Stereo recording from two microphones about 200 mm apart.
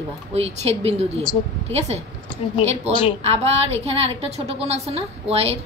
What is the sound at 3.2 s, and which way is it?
A woman's voice, 30° right (ahead or behind).